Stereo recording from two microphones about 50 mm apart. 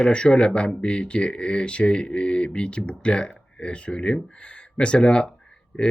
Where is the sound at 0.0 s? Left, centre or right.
Centre.